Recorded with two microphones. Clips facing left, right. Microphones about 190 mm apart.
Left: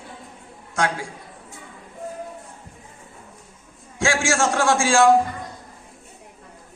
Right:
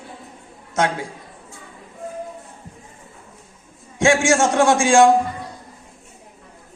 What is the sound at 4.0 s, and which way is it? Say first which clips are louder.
A man's voice: right 5 dB; 20° right (ahead or behind).